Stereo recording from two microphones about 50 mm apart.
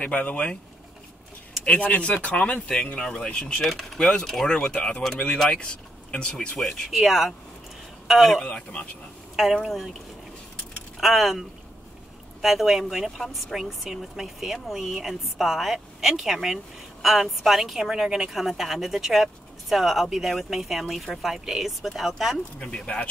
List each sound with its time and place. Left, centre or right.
0.0 s speech: left
1.6 s speech: left
3.6 s a woman's voice: centre; by 5.0 s left
5.2 s speech: centre
6.9 s a woman's voice: centre
8.4 s speech: centre
9.4 s a woman's voice: centre
11.0 s a woman's voice: centre
22.6 s speech: centre